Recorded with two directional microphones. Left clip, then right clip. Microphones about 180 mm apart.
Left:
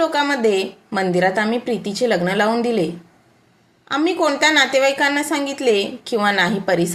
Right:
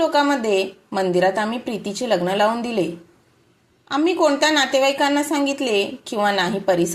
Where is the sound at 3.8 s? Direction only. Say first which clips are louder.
Even; 15° right (ahead or behind).